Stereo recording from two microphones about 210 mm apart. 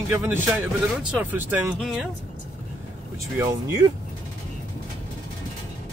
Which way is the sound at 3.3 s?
20° right (ahead or behind).